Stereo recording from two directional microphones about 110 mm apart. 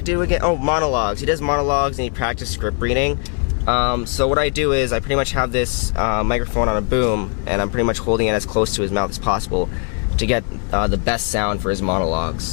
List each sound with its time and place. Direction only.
0.0 s speech: 15° left (ahead or behind)